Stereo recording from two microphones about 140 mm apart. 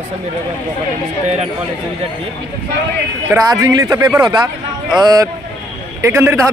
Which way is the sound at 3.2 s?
25° right (ahead or behind).